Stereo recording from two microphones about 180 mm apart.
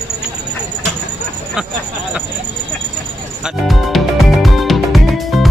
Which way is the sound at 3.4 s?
Centre (ahead or behind).